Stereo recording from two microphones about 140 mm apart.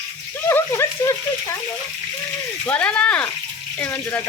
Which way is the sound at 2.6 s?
10° left (ahead or behind).